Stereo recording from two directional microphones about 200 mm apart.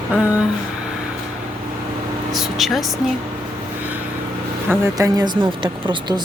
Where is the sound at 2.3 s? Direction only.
Centre (ahead or behind).